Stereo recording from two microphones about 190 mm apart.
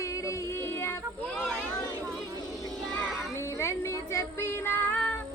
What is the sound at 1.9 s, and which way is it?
Vehicle, centre (ahead or behind).